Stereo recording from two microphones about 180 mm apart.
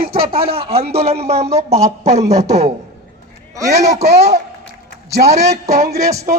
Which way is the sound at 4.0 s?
35° right (ahead or behind).